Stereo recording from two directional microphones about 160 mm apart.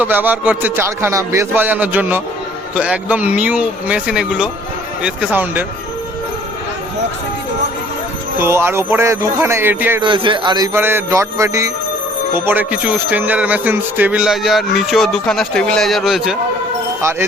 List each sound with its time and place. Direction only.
0.0 s a man's voice: 10° right (ahead or behind)
8.4 s a man's voice: 15° right (ahead or behind)
10.0 s mantra: 30° right (ahead or behind)
10.8 s mantra: 15° right (ahead or behind)
12.3 s speech: 10° right (ahead or behind)
17.0 s speech: 15° right (ahead or behind)